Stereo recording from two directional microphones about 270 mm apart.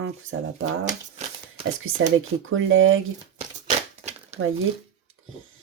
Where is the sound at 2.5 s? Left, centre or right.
Right.